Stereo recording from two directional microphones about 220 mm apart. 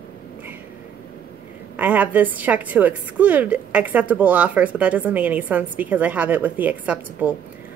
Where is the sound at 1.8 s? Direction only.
5° right (ahead or behind).